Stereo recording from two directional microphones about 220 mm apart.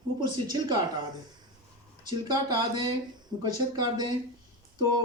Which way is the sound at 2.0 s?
20° right (ahead or behind).